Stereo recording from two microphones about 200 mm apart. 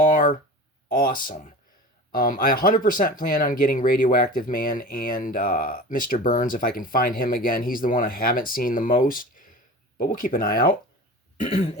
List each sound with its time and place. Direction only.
0.0 s a sound: 40° left (ahead or behind)
1.2 s throat clearing: 40° left (ahead or behind)
2.1 s speech: 45° left (ahead or behind)
11.3 s throat clearing: 30° left (ahead or behind)